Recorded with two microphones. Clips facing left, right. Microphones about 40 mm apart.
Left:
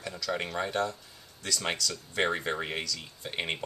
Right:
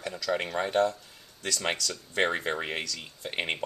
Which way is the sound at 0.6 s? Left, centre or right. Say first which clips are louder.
Right 6 dB; right.